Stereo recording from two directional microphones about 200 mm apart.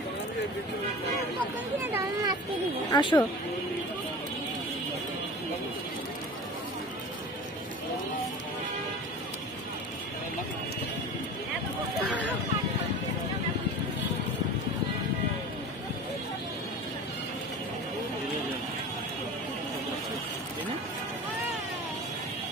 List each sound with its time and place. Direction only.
1.8 s speech: 10° right (ahead or behind)
2.9 s speech: 25° left (ahead or behind)